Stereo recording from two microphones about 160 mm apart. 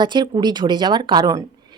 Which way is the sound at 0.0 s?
25° right (ahead or behind).